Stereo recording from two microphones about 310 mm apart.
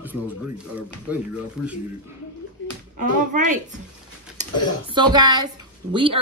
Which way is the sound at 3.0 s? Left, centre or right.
Right.